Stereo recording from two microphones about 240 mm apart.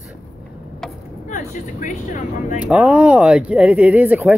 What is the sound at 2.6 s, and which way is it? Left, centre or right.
Speech, centre.